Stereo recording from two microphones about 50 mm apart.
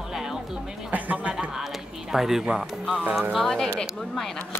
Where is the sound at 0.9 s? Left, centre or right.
Right.